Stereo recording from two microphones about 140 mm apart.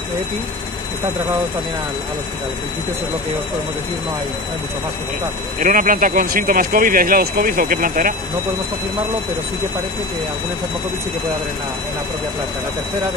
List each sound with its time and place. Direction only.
5.6 s speech: 70° right (ahead or behind)